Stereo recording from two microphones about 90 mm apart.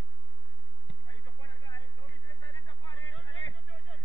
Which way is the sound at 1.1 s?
55° left (ahead or behind).